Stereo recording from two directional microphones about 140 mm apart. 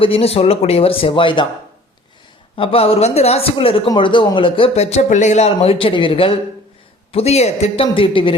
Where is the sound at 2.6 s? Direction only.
40° left (ahead or behind).